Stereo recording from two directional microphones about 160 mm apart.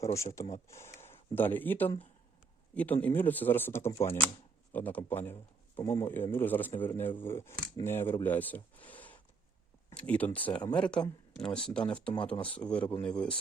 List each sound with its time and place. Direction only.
0.0 s a man's voice: 20° left (ahead or behind)
8.2 s a sound: 10° left (ahead or behind)
9.9 s speech: 10° left (ahead or behind)